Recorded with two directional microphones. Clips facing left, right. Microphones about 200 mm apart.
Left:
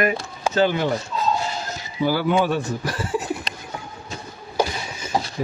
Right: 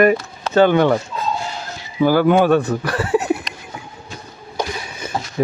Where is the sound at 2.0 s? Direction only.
50° right (ahead or behind); by 3.3 s 70° right (ahead or behind).